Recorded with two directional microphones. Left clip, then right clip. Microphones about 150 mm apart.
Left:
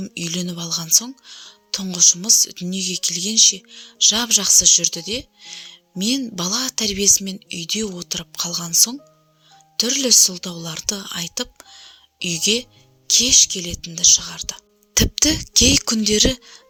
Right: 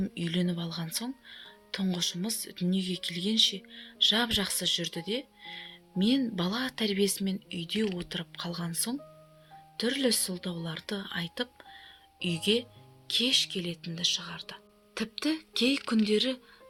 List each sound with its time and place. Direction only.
0.0 s a woman's voice: 35° left (ahead or behind)
14.9 s speech: 60° left (ahead or behind)